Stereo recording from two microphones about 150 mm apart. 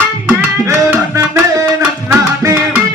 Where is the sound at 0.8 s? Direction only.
20° right (ahead or behind).